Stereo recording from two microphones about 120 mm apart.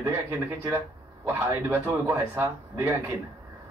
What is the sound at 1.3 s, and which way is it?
Speech, 20° right (ahead or behind).